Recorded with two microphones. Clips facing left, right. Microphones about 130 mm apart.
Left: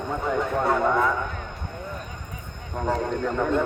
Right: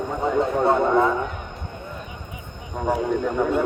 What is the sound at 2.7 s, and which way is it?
Speech, 10° right (ahead or behind).